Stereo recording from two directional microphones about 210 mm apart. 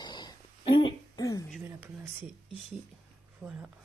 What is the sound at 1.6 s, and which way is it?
Speech, 10° right (ahead or behind).